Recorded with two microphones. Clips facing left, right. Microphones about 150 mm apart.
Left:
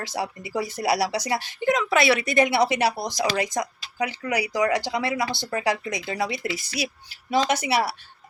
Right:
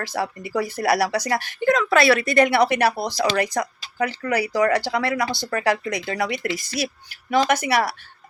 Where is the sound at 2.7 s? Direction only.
55° right (ahead or behind).